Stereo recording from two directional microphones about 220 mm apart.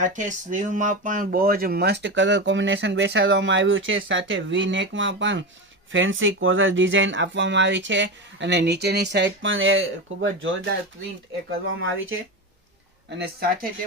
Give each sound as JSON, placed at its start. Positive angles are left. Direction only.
{"t": 0.0, "sound": "speech", "side_deg": -35}
{"t": 13.1, "sound": "speech", "side_deg": -45}